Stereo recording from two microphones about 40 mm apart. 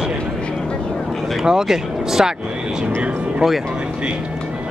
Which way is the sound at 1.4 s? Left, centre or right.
Centre.